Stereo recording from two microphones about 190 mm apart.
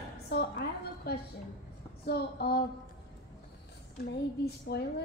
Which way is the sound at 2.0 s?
55° left (ahead or behind).